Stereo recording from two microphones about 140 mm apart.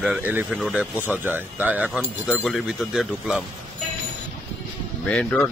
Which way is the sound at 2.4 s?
Centre (ahead or behind).